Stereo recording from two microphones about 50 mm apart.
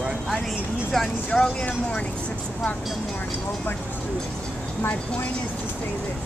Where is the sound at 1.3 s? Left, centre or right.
Left.